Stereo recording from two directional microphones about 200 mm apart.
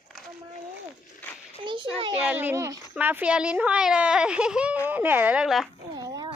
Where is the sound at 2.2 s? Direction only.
10° right (ahead or behind).